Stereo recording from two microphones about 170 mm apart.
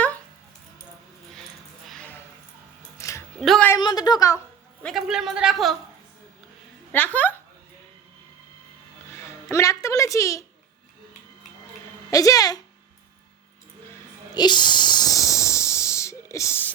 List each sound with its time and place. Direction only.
1.9 s a sound: 5° left (ahead or behind)
3.0 s music: 15° left (ahead or behind)
3.4 s a woman's voice: centre (ahead or behind)
3.7 s a woman's voice: 25° left (ahead or behind)
4.8 s a woman's voice: centre (ahead or behind)
6.9 s speech: 10° left (ahead or behind)
9.2 s a woman's voice: 15° left (ahead or behind)
12.1 s a woman's voice: 20° left (ahead or behind)
14.3 s hiss: 25° left (ahead or behind)